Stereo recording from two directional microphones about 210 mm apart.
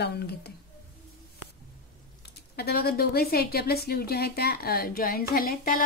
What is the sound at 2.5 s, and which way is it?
A woman's voice, 50° left (ahead or behind).